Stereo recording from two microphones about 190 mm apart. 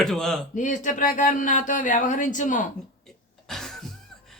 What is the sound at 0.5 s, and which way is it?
Speech, 40° left (ahead or behind).